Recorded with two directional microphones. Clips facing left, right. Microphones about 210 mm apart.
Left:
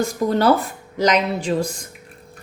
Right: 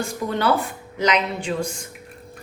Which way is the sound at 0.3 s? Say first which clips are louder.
Left 4 dB; 40° left (ahead or behind).